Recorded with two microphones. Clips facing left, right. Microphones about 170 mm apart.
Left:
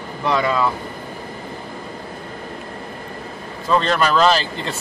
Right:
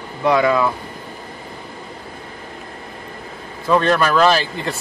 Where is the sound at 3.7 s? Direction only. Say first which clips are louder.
Right 2 dB; 10° right (ahead or behind).